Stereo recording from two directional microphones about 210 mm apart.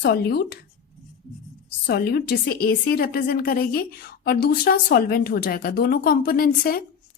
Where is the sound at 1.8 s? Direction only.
50° left (ahead or behind).